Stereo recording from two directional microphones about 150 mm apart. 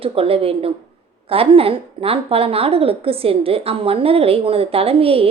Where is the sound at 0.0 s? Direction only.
40° right (ahead or behind).